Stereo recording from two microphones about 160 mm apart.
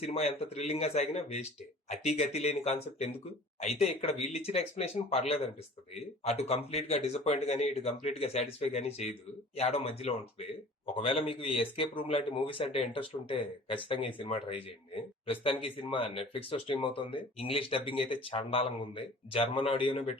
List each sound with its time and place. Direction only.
0.0 s speech: 40° left (ahead or behind)